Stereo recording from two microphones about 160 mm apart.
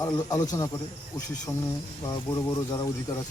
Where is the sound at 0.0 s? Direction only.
25° left (ahead or behind).